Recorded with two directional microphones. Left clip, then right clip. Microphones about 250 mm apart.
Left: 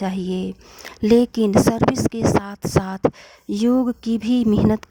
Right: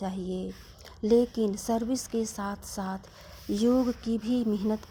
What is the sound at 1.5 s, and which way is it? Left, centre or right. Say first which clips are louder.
Speech: left 13 dB; left.